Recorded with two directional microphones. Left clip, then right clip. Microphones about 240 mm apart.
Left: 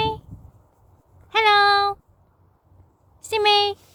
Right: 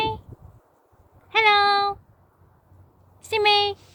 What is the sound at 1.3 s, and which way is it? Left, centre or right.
Child singing, left.